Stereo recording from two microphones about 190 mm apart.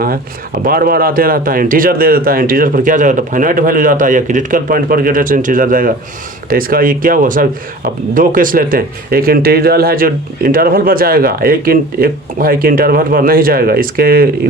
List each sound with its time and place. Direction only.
0.6 s speech: 50° right (ahead or behind)